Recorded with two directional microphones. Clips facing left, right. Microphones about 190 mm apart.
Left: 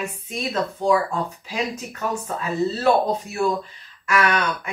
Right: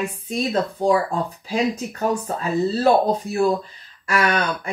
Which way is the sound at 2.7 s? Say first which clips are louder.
Right 3 dB; 35° right (ahead or behind).